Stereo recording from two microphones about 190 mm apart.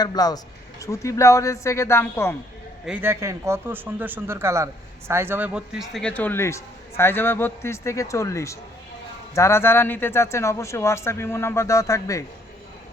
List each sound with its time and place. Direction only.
0.0 s a man's voice: 20° left (ahead or behind)
2.8 s speech: 10° right (ahead or behind); by 12.2 s 15° left (ahead or behind)